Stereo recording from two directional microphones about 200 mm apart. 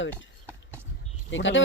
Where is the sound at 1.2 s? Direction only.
65° left (ahead or behind).